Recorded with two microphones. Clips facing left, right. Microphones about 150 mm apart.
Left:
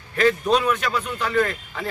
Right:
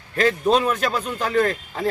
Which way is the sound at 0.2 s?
35° right (ahead or behind).